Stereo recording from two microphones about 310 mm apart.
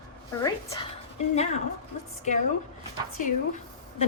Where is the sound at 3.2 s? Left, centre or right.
Left.